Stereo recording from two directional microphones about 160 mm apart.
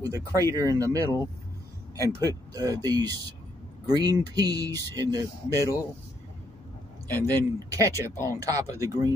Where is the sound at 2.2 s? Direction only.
20° right (ahead or behind).